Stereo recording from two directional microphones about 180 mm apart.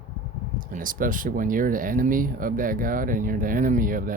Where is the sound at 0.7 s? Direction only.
50° right (ahead or behind).